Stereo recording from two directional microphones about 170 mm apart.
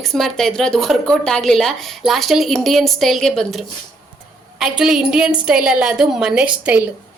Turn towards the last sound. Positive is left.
turn(degrees=-5)  # may be behind; listen again after turning